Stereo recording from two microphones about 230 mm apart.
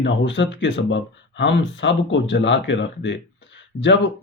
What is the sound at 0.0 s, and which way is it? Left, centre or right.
Speech, left.